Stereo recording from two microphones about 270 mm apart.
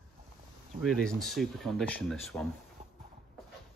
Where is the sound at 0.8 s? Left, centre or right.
Centre.